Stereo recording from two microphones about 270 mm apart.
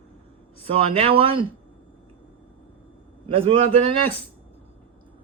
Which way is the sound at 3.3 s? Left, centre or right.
Right.